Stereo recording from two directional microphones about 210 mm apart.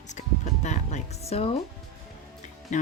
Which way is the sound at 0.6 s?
35° left (ahead or behind).